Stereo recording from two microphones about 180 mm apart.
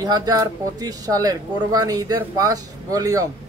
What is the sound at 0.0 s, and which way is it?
Speech, 20° right (ahead or behind).